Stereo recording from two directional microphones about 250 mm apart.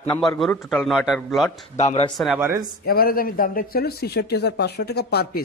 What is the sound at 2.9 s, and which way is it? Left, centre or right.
A man's voice, left.